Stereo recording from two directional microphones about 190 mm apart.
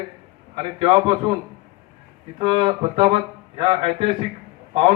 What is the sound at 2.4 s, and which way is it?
A man's voice, 25° right (ahead or behind).